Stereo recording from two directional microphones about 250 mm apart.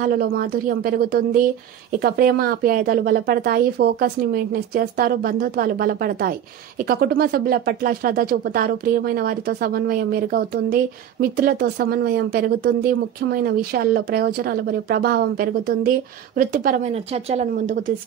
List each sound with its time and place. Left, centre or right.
0.0 s speech: right